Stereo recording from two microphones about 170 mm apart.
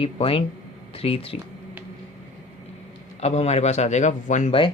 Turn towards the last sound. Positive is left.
turn(degrees=45)  # may be behind; listen again after turning